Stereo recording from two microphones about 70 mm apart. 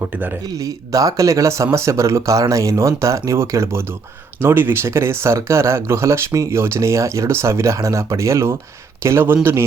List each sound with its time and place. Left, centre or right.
0.6 s speech: right